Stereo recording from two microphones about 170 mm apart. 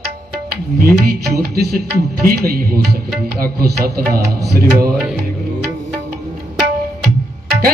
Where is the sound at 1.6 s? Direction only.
65° right (ahead or behind).